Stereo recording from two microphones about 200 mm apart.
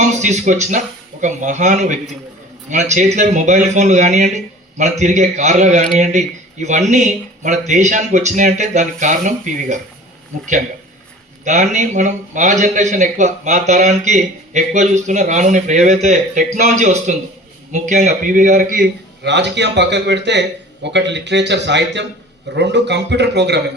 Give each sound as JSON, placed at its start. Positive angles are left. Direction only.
{"t": 0.1, "sound": "a man's voice", "side_deg": -35}
{"t": 11.4, "sound": "a man's voice", "side_deg": -35}